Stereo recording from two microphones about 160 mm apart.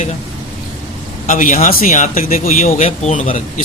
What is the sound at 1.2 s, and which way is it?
Speech, 55° left (ahead or behind).